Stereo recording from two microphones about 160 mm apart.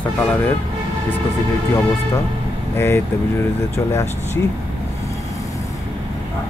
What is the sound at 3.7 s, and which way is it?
Speech, 15° left (ahead or behind).